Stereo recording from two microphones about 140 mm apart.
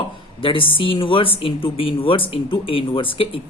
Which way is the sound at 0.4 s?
40° left (ahead or behind).